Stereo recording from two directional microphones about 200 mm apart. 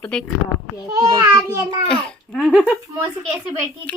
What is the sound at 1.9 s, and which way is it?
Speech, 5° left (ahead or behind).